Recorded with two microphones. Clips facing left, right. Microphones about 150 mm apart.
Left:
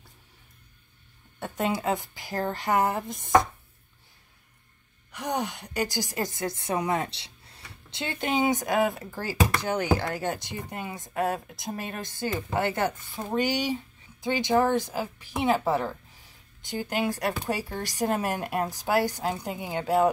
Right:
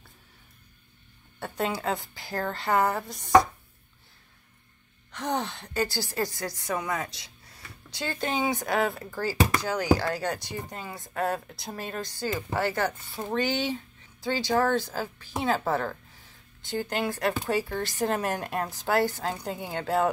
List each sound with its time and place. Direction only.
1.4 s a woman's voice: 15° left (ahead or behind)
5.1 s a woman's voice: 10° left (ahead or behind)